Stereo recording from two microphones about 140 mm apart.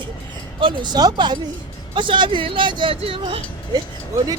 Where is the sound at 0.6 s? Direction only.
35° right (ahead or behind).